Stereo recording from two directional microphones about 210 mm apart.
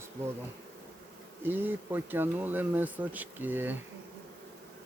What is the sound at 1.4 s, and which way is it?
Speech, 10° right (ahead or behind).